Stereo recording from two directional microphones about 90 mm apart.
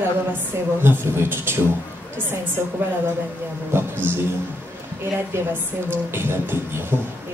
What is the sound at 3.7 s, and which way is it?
Music, 25° right (ahead or behind).